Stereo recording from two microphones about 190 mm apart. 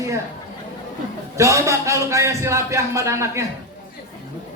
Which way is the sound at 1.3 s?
15° right (ahead or behind).